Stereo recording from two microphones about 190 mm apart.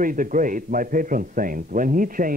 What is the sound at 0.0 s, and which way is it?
A man's voice, 45° right (ahead or behind).